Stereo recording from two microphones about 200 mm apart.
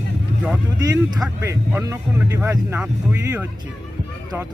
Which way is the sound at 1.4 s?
15° right (ahead or behind).